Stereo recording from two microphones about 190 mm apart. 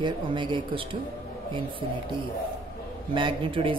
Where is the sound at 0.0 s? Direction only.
25° right (ahead or behind).